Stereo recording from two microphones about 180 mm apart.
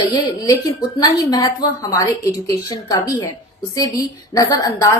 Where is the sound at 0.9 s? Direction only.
20° left (ahead or behind).